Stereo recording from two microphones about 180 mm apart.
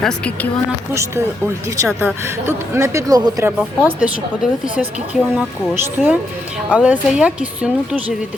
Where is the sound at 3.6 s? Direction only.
5° right (ahead or behind).